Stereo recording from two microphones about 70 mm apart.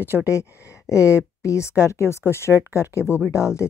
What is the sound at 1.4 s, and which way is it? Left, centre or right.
Speech, left.